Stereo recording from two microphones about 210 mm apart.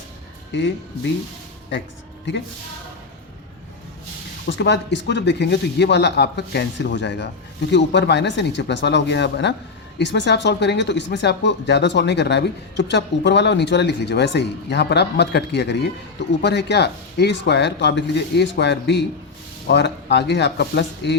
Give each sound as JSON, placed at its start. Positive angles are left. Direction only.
{"t": 0.5, "sound": "speech", "side_deg": 60}
{"t": 2.3, "sound": "speech", "side_deg": 60}
{"t": 4.4, "sound": "speech", "side_deg": 60}